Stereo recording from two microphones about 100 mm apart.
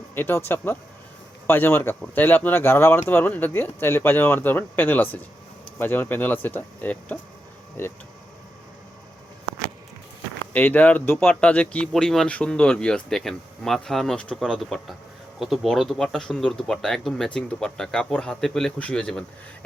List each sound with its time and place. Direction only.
0.1 s speech: 20° left (ahead or behind)
10.5 s speech: 15° left (ahead or behind)